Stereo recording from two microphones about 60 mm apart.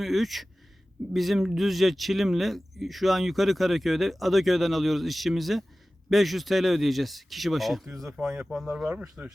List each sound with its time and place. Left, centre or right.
0.0 s speech: centre
8.6 s speech: centre